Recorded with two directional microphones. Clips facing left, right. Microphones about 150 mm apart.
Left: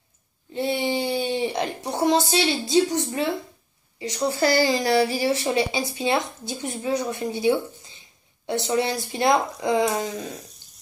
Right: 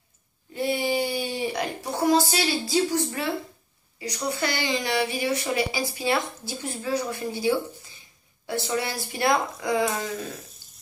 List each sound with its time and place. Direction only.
0.6 s a sound: 20° left (ahead or behind)
2.3 s a woman's voice: 25° left (ahead or behind)
10.6 s water tap: 20° left (ahead or behind)